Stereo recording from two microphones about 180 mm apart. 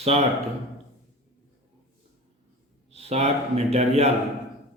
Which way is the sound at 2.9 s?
35° right (ahead or behind).